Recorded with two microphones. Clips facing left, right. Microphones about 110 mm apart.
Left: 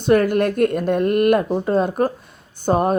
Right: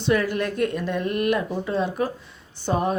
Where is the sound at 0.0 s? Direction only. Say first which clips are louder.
Left 7 dB; 50° left (ahead or behind).